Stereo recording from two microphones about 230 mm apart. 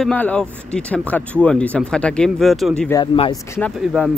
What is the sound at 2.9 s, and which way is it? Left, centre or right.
Speech, left.